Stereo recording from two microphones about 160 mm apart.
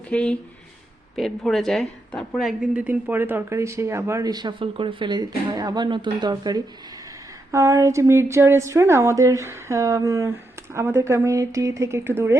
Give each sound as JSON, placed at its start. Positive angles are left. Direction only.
{"t": 0.1, "sound": "a woman's voice", "side_deg": 5}